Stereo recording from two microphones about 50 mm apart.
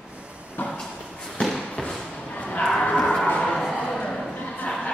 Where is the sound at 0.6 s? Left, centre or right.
Left.